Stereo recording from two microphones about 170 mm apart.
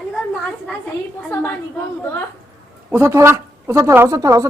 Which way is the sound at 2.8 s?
15° right (ahead or behind).